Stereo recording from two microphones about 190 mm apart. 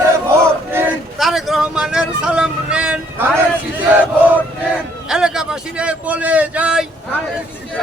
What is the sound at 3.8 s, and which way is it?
Chant, 10° right (ahead or behind).